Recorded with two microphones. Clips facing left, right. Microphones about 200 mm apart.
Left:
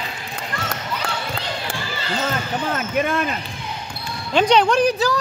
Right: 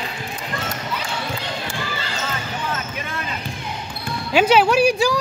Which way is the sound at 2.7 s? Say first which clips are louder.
Left 8 dB; 55° left (ahead or behind).